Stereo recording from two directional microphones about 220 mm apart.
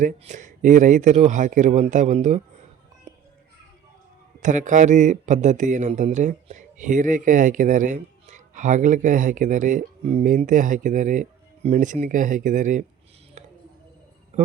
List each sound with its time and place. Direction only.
0.0 s speech: 35° right (ahead or behind)
4.4 s speech: 35° right (ahead or behind)
13.4 s a sound: 30° right (ahead or behind)